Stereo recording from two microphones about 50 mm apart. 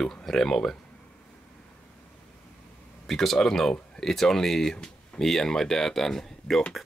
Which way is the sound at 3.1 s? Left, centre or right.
Centre.